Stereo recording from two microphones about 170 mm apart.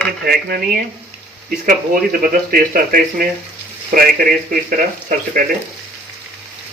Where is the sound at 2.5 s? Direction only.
60° right (ahead or behind).